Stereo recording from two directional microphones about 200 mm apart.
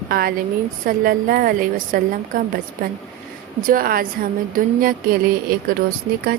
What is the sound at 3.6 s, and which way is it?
A woman's voice, 45° right (ahead or behind).